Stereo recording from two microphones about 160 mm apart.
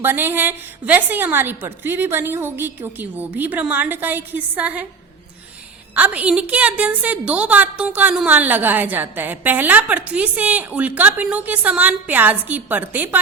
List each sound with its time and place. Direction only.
0.0 s a woman's voice: 15° right (ahead or behind)
5.9 s a woman's voice: 10° right (ahead or behind)